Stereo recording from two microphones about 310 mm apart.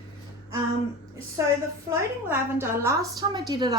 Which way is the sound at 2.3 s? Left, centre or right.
Centre.